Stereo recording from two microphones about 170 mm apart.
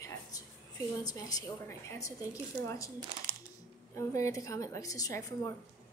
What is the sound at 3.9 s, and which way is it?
A woman's voice, 20° left (ahead or behind).